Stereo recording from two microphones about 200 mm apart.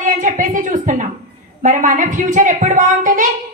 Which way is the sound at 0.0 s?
40° right (ahead or behind).